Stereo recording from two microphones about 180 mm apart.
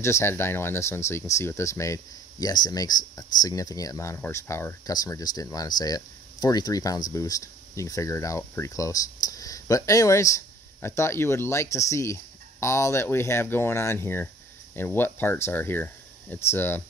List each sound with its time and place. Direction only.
0.0 s speech: 15° left (ahead or behind)